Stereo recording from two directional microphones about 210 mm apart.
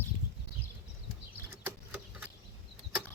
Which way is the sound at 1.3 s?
10° right (ahead or behind).